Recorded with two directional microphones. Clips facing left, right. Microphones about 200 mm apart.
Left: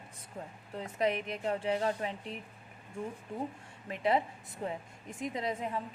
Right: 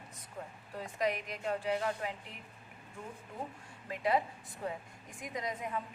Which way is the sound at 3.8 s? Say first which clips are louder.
Left 2 dB; 25° left (ahead or behind).